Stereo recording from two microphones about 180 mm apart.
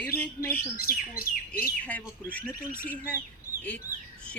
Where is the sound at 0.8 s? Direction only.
55° left (ahead or behind).